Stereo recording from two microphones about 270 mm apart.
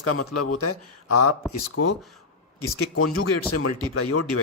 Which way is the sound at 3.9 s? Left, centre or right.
Left.